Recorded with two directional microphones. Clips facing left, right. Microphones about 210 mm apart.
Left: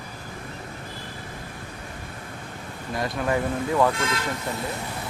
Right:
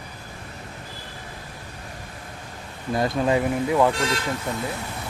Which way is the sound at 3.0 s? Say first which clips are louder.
Right 4 dB; 20° right (ahead or behind).